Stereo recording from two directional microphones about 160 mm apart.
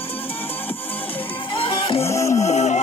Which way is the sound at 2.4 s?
45° left (ahead or behind).